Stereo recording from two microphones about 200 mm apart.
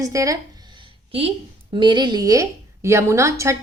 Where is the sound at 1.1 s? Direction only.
25° right (ahead or behind).